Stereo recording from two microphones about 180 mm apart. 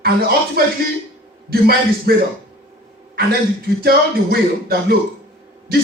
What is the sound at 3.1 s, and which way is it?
A man's voice, 55° right (ahead or behind).